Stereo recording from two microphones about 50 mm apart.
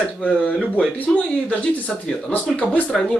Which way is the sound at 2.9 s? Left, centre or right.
Centre.